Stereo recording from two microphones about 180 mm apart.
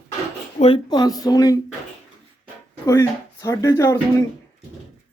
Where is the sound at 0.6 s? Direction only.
30° left (ahead or behind).